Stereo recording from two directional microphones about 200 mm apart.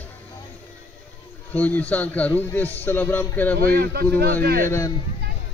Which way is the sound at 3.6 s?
50° right (ahead or behind).